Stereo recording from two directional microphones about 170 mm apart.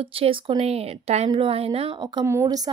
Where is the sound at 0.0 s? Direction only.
30° right (ahead or behind).